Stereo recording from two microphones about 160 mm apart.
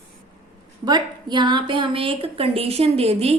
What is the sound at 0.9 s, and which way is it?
A woman's voice, 25° right (ahead or behind).